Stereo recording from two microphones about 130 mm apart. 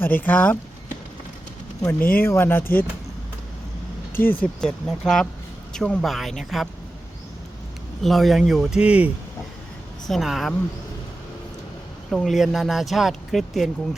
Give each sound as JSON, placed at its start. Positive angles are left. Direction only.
{"t": 0.0, "sound": "speech", "side_deg": 15}
{"t": 1.8, "sound": "speech", "side_deg": 15}
{"t": 4.3, "sound": "speech", "side_deg": 10}
{"t": 8.0, "sound": "speech", "side_deg": 0}
{"t": 10.1, "sound": "speech", "side_deg": 0}
{"t": 12.1, "sound": "speech", "side_deg": 0}